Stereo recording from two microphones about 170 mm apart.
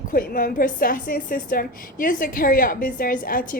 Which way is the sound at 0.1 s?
55° left (ahead or behind).